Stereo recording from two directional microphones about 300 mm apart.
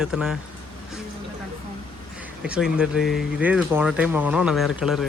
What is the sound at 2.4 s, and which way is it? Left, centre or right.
Speech, centre.